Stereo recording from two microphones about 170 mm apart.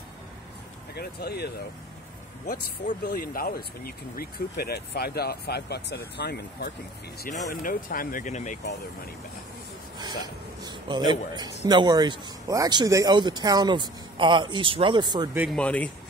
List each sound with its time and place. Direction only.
0.9 s speech: 70° left (ahead or behind)
2.4 s speech: 50° left (ahead or behind); by 6.7 s 75° left (ahead or behind)
7.2 s speech: 50° left (ahead or behind)
9.9 s a man's voice: 25° right (ahead or behind)
15.5 s a man's voice: 10° left (ahead or behind)